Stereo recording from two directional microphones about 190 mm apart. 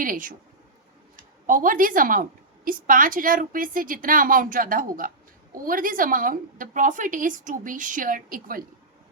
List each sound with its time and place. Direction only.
0.0 s a woman's voice: 45° right (ahead or behind)
1.5 s a woman's voice: 45° right (ahead or behind)